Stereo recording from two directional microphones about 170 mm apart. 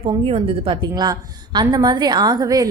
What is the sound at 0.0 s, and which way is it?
A woman's voice, 30° right (ahead or behind).